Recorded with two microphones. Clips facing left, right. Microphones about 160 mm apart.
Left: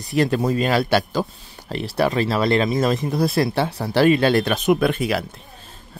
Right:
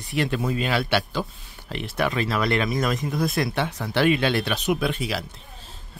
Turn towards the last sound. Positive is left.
turn(degrees=55)  # may be behind; listen again after turning